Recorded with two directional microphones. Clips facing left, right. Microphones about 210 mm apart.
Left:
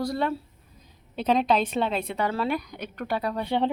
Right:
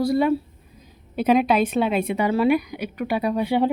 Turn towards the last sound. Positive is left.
turn(degrees=-10)  # may be behind; listen again after turning